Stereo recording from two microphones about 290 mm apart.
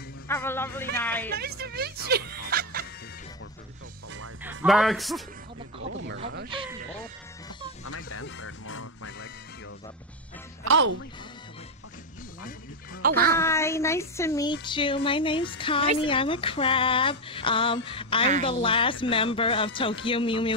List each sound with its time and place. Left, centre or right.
0.3 s speech: centre
1.3 s speech: right
4.5 s speech: centre
5.8 s a sound: right
7.9 s music: left
10.6 s speech: right
13.0 s speech: right
13.4 s speech: centre